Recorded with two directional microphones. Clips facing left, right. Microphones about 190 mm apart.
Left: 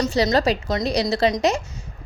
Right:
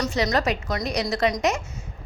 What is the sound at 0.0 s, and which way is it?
A woman's voice, 30° left (ahead or behind).